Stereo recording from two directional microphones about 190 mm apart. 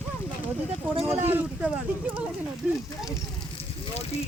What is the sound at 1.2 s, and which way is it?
Speech, 10° right (ahead or behind).